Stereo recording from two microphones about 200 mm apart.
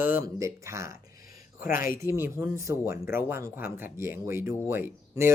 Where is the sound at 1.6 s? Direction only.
45° left (ahead or behind).